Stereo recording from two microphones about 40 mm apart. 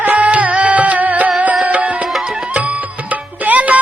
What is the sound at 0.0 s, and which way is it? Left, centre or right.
Music, right.